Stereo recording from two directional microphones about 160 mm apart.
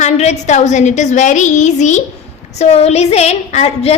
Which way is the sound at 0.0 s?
45° left (ahead or behind).